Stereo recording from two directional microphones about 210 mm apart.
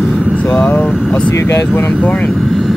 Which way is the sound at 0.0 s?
Centre (ahead or behind).